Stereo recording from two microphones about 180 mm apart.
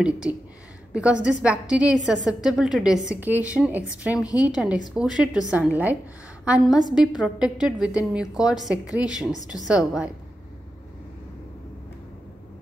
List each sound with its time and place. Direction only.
0.0 s a woman's voice: 5° right (ahead or behind)
4.1 s a woman's voice: 20° left (ahead or behind)
4.6 s a woman's voice: 5° right (ahead or behind)